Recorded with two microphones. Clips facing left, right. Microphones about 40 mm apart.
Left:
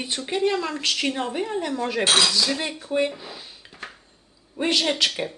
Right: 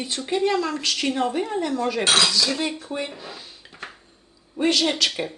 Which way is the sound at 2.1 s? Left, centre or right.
Centre.